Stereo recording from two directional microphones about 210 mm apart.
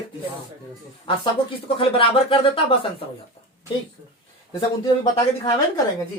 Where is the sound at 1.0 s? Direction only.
25° left (ahead or behind).